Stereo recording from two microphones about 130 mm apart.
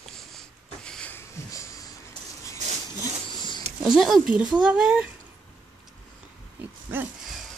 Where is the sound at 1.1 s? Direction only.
25° left (ahead or behind).